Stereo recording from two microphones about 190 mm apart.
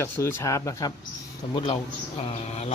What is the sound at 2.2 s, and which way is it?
Speech, 35° left (ahead or behind).